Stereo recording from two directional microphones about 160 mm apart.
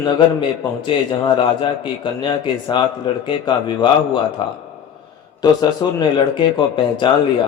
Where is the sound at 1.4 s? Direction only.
30° left (ahead or behind).